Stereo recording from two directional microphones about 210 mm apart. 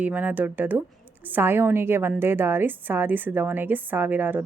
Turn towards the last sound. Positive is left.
turn(degrees=-10)  # may be behind; listen again after turning